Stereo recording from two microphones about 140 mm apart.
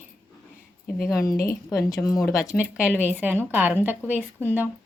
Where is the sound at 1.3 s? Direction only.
25° left (ahead or behind).